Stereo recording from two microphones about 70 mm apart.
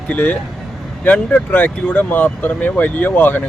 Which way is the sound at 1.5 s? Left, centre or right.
Left.